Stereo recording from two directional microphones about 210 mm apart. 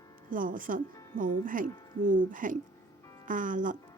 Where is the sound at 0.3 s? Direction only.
40° right (ahead or behind).